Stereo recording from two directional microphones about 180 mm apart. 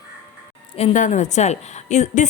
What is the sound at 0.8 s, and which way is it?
A woman's voice, 40° left (ahead or behind).